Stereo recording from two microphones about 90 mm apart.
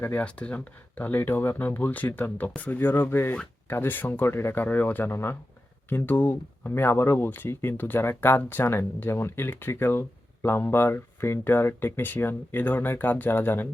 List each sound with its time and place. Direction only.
0.0 s speech: 20° left (ahead or behind)